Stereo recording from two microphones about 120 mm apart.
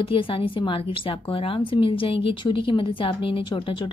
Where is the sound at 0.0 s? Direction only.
45° left (ahead or behind).